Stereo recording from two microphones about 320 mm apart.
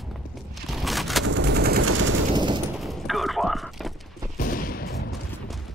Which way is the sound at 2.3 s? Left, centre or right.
Centre.